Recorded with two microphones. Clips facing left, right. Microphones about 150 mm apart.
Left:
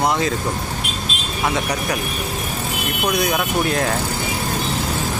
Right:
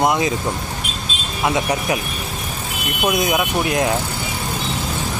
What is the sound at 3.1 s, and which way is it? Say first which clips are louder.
Speech: right 2 dB; 20° right (ahead or behind).